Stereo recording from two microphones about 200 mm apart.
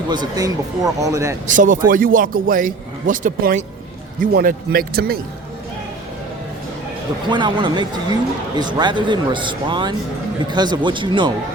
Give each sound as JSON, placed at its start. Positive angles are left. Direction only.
{"t": 0.1, "sound": "speech", "side_deg": -20}
{"t": 1.5, "sound": "a man's voice", "side_deg": -40}
{"t": 7.3, "sound": "a man's voice", "side_deg": -25}